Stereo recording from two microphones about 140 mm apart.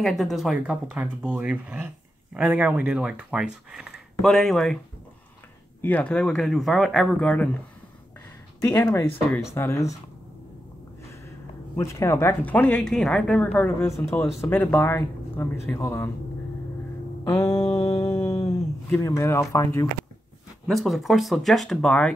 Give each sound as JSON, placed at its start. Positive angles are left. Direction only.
{"t": 0.0, "sound": "speech", "side_deg": 0}
{"t": 5.8, "sound": "speech", "side_deg": 10}
{"t": 8.5, "sound": "speech", "side_deg": 20}
{"t": 11.7, "sound": "speech", "side_deg": 20}
{"t": 17.2, "sound": "mantra", "side_deg": 25}
{"t": 17.7, "sound": "music", "side_deg": 25}
{"t": 18.9, "sound": "speech", "side_deg": 20}
{"t": 20.6, "sound": "speech", "side_deg": 0}